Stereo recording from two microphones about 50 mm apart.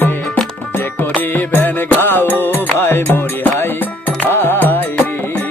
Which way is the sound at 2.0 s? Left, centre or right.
Left.